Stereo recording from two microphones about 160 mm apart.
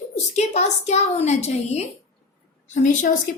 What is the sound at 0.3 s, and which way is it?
A woman's voice, 45° left (ahead or behind).